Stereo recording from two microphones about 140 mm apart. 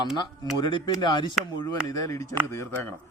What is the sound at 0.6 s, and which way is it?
A man's voice, 35° left (ahead or behind).